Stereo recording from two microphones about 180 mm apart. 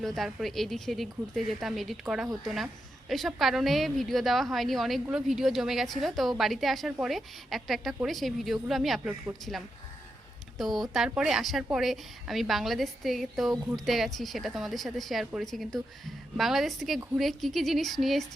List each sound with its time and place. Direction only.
0.0 s a woman's voice: centre (ahead or behind)